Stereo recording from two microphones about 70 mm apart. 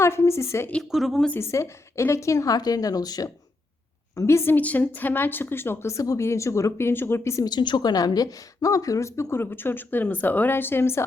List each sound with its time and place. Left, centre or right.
0.0 s a woman's voice: left
0.8 s speech: centre
1.4 s a woman's voice: left
2.6 s a woman's voice: left
4.3 s a woman's voice: left
4.5 s a woman's voice: left
7.4 s a woman's voice: left